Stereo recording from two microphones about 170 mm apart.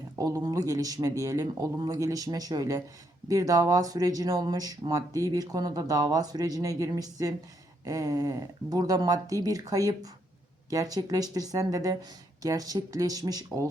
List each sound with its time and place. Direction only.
0.2 s speech: 20° right (ahead or behind)